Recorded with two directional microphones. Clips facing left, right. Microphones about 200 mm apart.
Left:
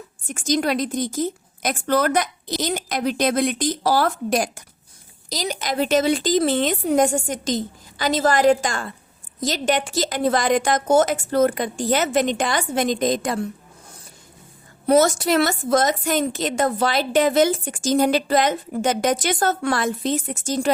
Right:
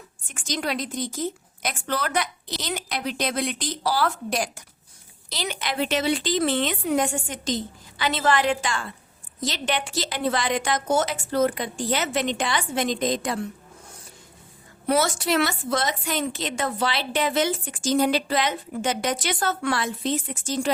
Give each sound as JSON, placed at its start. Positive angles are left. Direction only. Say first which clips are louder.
{"t": 0.3, "sound": "a woman's voice", "louder": "left 7 dB", "side_deg": 40}
{"t": 14.8, "sound": "a woman's voice", "louder": "left 6 dB", "side_deg": 40}